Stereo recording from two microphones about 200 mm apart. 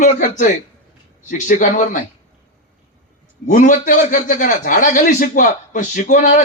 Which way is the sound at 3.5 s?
40° left (ahead or behind).